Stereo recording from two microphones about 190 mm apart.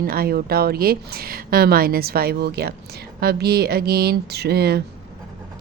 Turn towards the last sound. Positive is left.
turn(degrees=-60)  # may be behind; listen again after turning